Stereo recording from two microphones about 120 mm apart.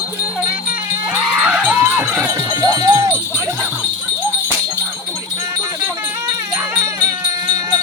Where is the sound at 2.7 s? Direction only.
25° right (ahead or behind).